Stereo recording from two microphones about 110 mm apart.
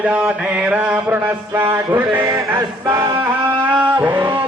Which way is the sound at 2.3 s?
35° right (ahead or behind).